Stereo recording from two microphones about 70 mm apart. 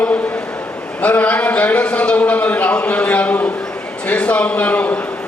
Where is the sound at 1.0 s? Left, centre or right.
Left.